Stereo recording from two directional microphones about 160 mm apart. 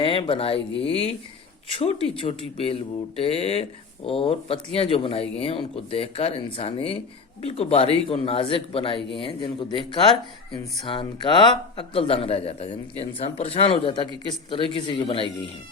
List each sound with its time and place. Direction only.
0.0 s speech: 35° left (ahead or behind)